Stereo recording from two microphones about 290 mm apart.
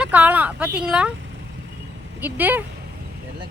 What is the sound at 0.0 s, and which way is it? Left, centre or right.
Speech, centre.